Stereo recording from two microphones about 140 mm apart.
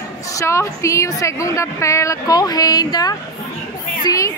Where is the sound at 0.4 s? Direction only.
20° left (ahead or behind).